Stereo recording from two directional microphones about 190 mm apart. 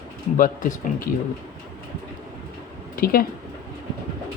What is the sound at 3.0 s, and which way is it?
Speech, 50° left (ahead or behind).